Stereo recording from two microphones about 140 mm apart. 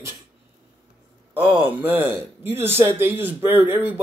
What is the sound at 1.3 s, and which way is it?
Speech, 15° right (ahead or behind).